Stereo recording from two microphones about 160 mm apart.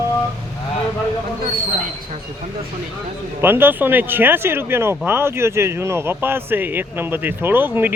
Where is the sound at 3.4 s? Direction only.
15° right (ahead or behind).